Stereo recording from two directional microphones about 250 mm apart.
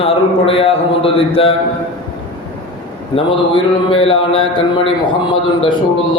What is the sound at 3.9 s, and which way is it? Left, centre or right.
Mantra, left.